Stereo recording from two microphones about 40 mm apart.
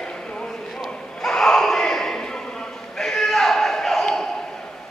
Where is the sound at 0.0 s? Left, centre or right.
Centre.